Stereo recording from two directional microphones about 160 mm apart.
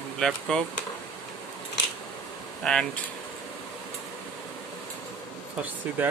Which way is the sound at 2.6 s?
5° left (ahead or behind).